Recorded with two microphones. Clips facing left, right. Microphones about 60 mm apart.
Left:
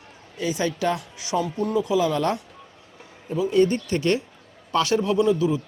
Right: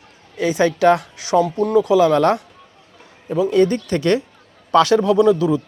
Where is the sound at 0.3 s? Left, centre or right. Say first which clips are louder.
Right 8 dB; right.